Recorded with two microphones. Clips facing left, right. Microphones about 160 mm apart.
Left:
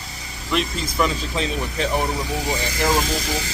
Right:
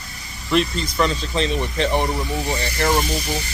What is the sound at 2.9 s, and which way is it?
Speech, 90° left.